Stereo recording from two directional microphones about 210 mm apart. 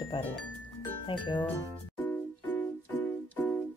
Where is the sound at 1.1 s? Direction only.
20° left (ahead or behind).